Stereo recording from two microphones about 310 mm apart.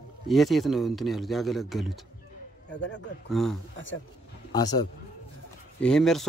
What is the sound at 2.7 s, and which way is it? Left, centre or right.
Speech, left.